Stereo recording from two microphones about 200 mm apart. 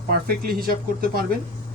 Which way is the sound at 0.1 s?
50° right (ahead or behind).